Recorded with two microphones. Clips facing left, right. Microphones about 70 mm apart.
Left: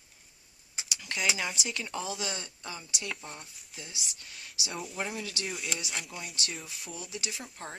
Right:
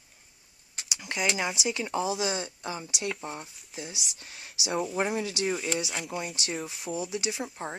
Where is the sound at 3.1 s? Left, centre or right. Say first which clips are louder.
Right 7 dB; centre.